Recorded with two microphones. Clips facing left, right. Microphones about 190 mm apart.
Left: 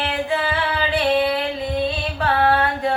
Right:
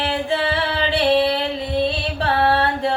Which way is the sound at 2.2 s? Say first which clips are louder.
Even; 30° right (ahead or behind).